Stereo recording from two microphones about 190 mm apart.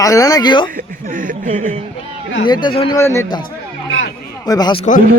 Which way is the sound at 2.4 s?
25° left (ahead or behind).